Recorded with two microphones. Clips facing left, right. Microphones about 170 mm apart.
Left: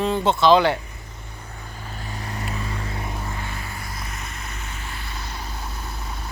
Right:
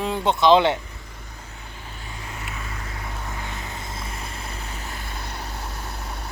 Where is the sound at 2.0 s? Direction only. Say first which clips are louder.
Left 5 dB; 40° left (ahead or behind).